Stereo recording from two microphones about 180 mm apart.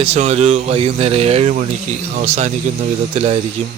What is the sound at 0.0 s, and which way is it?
A man's voice, 35° right (ahead or behind).